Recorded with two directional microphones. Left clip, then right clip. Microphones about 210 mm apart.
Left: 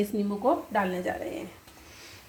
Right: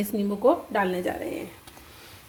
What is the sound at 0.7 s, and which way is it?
Speech, 35° right (ahead or behind).